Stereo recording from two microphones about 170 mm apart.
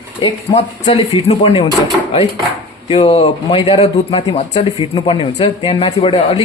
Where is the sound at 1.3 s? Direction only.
35° left (ahead or behind).